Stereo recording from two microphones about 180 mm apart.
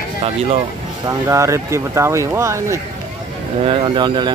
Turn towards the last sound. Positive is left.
turn(degrees=-25)  # may be behind; listen again after turning